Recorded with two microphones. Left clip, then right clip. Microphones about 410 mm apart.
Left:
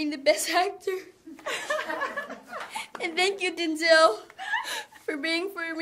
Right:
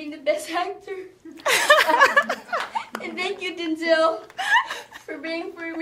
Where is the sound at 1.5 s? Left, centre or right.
Right.